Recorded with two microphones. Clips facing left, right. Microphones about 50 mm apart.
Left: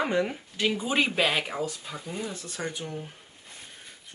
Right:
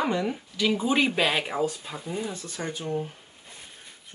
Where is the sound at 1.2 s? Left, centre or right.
Centre.